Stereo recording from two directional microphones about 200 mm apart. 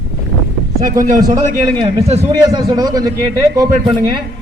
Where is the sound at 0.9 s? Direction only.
40° right (ahead or behind).